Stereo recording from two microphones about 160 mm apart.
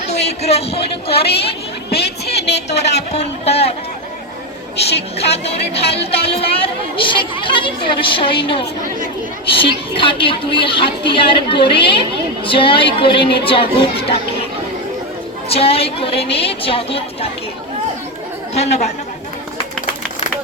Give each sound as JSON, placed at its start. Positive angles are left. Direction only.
{"t": 0.1, "sound": "a woman's voice", "side_deg": 40}
{"t": 1.9, "sound": "a sound", "side_deg": 90}
{"t": 2.9, "sound": "a woman's voice", "side_deg": 45}
{"t": 5.1, "sound": "a woman's voice", "side_deg": 40}
{"t": 6.4, "sound": "a woman's voice", "side_deg": 35}
{"t": 15.4, "sound": "a woman's voice", "side_deg": 35}
{"t": 18.5, "sound": "speech", "side_deg": 45}